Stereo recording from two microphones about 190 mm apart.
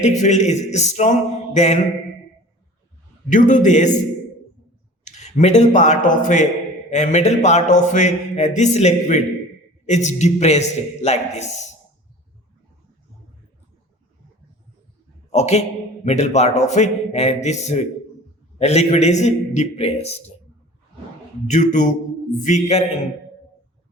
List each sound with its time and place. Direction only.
0.0 s speech: 40° left (ahead or behind)
3.2 s speech: 40° left (ahead or behind)
5.0 s speech: 35° left (ahead or behind)
15.3 s a man's voice: 35° left (ahead or behind)
21.5 s speech: 40° left (ahead or behind)